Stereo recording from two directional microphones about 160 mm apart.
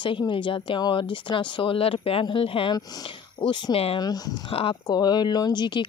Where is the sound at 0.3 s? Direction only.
30° left (ahead or behind).